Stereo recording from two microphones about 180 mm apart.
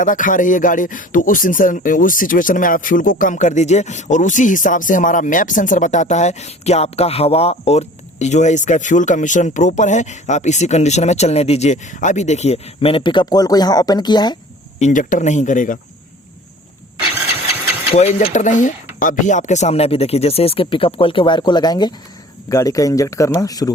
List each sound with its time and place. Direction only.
0.0 s speech: 45° left (ahead or behind); by 14.3 s 25° left (ahead or behind)
14.8 s speech: 45° left (ahead or behind)
17.9 s speech: 35° left (ahead or behind); by 23.7 s 20° left (ahead or behind)